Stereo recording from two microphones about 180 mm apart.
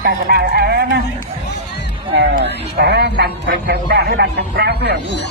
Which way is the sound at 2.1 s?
65° right (ahead or behind).